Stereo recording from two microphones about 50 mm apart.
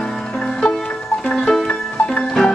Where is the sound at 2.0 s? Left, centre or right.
Centre.